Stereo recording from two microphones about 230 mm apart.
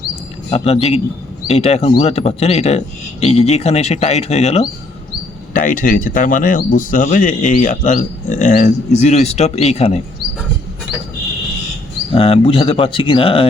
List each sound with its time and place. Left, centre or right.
0.5 s speech: left
12.1 s speech: left